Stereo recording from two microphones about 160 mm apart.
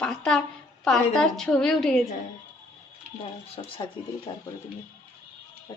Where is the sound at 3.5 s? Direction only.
35° left (ahead or behind).